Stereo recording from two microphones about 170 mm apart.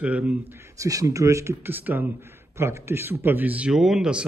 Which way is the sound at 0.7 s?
20° right (ahead or behind).